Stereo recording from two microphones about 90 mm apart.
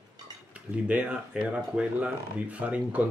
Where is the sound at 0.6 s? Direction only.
15° right (ahead or behind).